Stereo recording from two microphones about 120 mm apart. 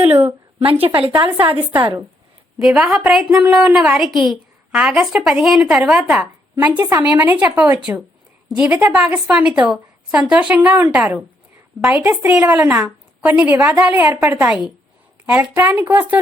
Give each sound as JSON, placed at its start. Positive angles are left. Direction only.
{"t": 0.3, "sound": "a woman's voice", "side_deg": -50}
{"t": 2.7, "sound": "a woman's voice", "side_deg": -5}